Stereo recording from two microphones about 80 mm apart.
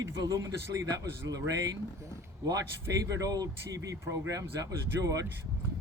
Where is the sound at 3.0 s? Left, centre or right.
Right.